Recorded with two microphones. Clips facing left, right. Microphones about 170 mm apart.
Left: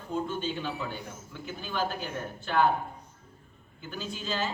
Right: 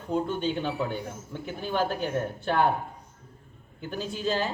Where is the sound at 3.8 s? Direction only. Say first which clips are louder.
Right 6 dB; 60° right (ahead or behind).